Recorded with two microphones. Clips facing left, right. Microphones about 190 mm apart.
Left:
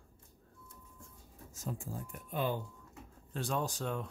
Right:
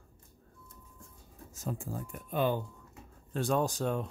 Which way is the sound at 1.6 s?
65° right (ahead or behind).